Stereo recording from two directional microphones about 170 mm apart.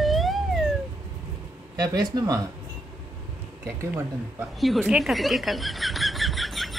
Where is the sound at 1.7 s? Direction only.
20° right (ahead or behind).